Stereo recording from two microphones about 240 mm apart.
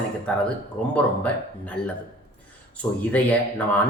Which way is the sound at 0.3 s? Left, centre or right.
Centre.